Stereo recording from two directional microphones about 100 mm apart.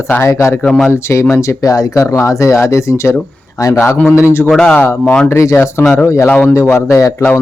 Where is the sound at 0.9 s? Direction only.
25° left (ahead or behind).